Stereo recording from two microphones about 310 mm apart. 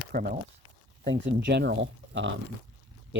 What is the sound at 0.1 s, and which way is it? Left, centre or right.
Speech, right.